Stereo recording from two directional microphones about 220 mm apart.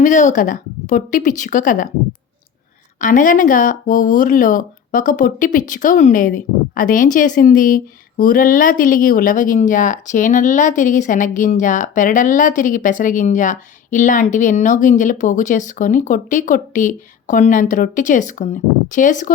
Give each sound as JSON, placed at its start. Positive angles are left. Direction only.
{"t": 0.0, "sound": "speech", "side_deg": 35}
{"t": 3.0, "sound": "speech", "side_deg": 35}